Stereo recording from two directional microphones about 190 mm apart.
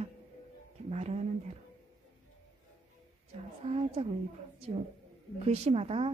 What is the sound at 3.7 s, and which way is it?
Speech, 30° right (ahead or behind).